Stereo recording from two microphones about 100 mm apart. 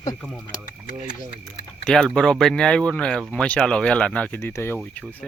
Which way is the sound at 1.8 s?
5° left (ahead or behind).